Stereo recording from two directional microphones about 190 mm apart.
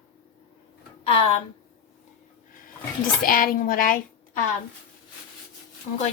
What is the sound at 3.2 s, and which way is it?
A child's voice, 50° left (ahead or behind).